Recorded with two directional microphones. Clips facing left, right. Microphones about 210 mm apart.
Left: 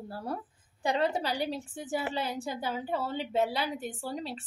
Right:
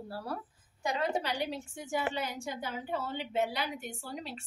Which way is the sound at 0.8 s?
30° left (ahead or behind).